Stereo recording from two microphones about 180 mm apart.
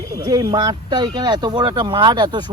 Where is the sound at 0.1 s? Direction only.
20° right (ahead or behind).